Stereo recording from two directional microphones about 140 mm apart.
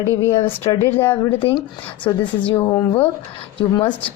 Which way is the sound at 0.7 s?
35° left (ahead or behind).